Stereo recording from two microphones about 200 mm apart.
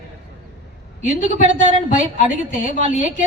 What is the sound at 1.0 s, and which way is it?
A woman's voice, 40° left (ahead or behind).